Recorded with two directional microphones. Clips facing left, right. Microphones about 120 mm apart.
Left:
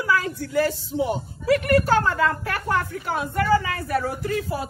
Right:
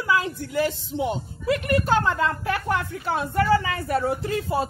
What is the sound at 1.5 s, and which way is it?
Speech, 50° left (ahead or behind).